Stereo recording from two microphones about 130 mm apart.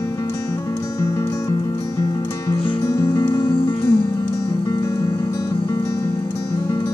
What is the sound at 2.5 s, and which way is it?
Music, 40° left (ahead or behind).